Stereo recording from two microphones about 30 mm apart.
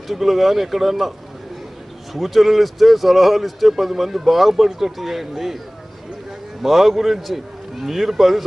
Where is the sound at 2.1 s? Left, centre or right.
Centre.